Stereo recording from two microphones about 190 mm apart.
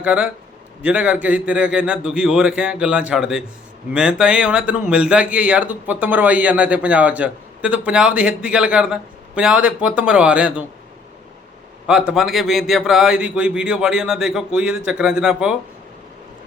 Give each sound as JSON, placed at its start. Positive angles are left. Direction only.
{"t": 0.0, "sound": "a man's voice", "side_deg": -5}
{"t": 11.9, "sound": "speech", "side_deg": -5}